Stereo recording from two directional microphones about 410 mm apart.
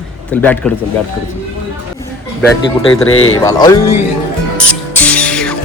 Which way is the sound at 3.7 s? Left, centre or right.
Left.